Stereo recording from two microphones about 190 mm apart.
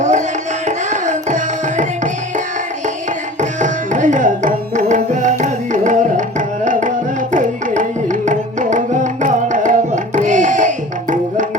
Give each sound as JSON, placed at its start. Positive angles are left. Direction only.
{"t": 0.0, "sound": "music", "side_deg": -40}
{"t": 3.6, "sound": "tabla", "side_deg": -40}
{"t": 6.7, "sound": "music", "side_deg": -45}